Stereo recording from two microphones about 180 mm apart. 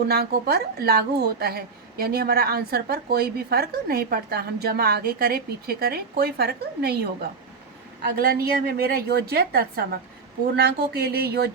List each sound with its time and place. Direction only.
0.1 s a woman's voice: 60° right (ahead or behind)